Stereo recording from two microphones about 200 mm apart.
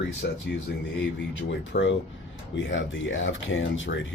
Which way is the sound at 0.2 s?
50° left (ahead or behind).